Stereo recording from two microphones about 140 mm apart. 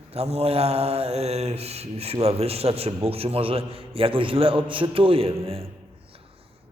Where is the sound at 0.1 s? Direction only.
45° right (ahead or behind).